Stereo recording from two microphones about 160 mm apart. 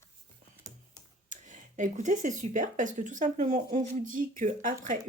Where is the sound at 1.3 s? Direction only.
50° right (ahead or behind).